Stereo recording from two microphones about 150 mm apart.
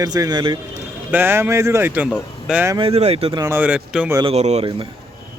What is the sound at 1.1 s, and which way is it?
A man's voice, 15° right (ahead or behind).